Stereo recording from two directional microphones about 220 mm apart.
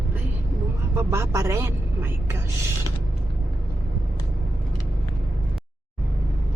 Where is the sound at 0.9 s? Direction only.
10° right (ahead or behind).